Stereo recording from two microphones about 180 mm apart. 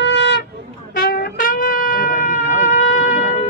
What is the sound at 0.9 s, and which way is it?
Wind instrument, 60° left (ahead or behind).